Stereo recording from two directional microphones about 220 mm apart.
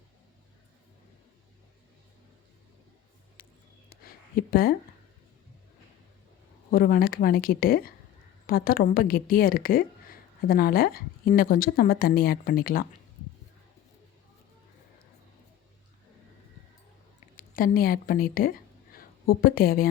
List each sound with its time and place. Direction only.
3.8 s a sound: 40° left (ahead or behind)
6.7 s a woman's voice: 40° left (ahead or behind)
17.3 s a woman's voice: 40° left (ahead or behind)